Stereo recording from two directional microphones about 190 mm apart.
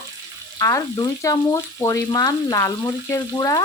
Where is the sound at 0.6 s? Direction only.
15° left (ahead or behind).